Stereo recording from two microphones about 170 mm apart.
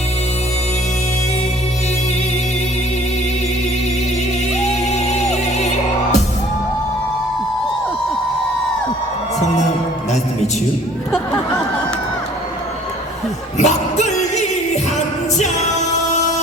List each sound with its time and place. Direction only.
4.9 s music: 40° left (ahead or behind)
13.6 s music: 45° left (ahead or behind)
15.4 s music: 45° left (ahead or behind)